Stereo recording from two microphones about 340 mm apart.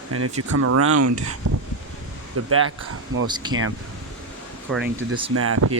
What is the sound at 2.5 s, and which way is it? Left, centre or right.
Speech, right.